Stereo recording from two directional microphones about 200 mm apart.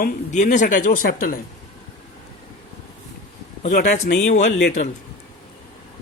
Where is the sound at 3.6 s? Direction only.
35° left (ahead or behind).